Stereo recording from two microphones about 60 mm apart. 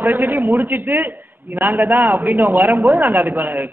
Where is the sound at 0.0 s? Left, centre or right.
Right.